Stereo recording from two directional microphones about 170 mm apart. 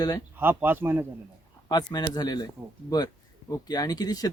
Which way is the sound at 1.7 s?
25° left (ahead or behind).